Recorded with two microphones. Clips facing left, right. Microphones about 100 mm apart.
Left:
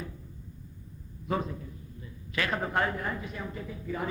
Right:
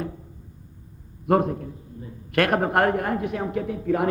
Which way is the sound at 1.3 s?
60° right (ahead or behind).